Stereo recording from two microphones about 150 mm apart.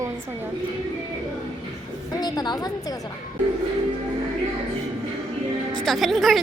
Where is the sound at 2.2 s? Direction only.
30° left (ahead or behind).